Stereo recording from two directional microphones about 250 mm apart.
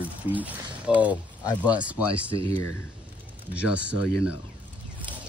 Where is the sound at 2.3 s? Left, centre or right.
Right.